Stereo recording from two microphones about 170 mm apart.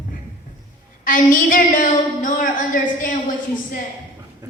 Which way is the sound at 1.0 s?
50° left (ahead or behind).